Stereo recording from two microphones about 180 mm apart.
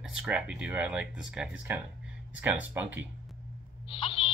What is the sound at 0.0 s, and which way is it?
Speech, 5° right (ahead or behind).